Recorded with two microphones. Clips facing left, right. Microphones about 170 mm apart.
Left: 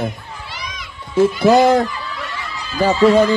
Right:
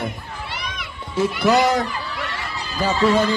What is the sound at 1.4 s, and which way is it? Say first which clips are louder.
Speech: left 4 dB; 55° left (ahead or behind).